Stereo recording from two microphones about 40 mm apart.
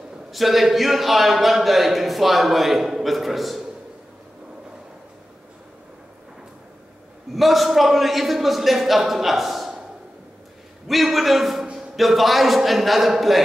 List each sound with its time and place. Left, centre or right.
0.3 s a man's voice: centre
7.3 s a man's voice: centre
10.9 s a man's voice: centre
11.6 s a sound: right
12.0 s a man's voice: centre